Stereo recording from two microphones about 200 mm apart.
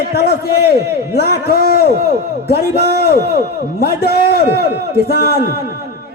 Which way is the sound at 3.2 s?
55° right (ahead or behind).